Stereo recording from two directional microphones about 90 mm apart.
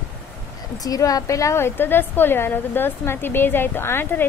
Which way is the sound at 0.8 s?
40° left (ahead or behind).